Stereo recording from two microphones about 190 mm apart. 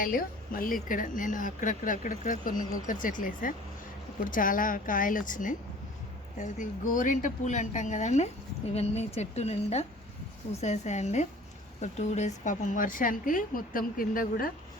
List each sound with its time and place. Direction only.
0.0 s speech: 45° left (ahead or behind)